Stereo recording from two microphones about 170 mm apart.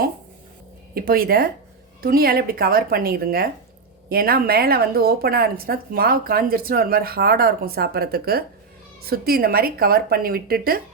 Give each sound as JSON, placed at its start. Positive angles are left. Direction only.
{"t": 0.9, "sound": "speech", "side_deg": -60}